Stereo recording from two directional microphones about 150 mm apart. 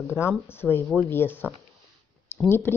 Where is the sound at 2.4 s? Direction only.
15° left (ahead or behind).